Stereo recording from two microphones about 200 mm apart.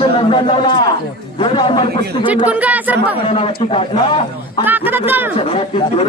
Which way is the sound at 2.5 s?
5° right (ahead or behind).